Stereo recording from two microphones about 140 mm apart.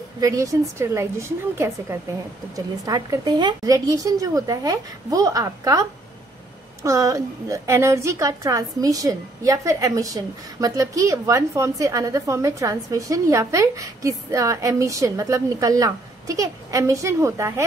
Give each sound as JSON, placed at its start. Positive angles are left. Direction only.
{"t": 0.2, "sound": "a woman's voice", "side_deg": -25}